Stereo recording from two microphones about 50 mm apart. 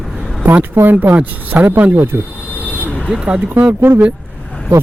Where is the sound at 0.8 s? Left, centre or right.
Right.